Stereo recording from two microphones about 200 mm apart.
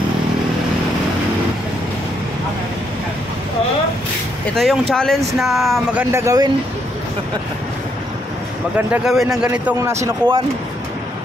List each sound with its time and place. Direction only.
4.6 s speech: centre (ahead or behind)
6.1 s a man's voice: 15° right (ahead or behind)
8.7 s a man's voice: 5° right (ahead or behind)